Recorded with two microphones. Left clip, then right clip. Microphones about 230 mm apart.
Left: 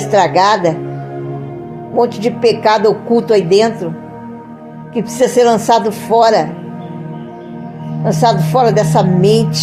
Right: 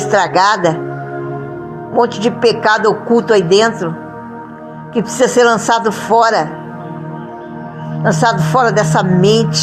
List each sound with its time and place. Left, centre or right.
0.0 s speech: centre
2.0 s speech: centre
4.9 s speech: centre
8.0 s speech: centre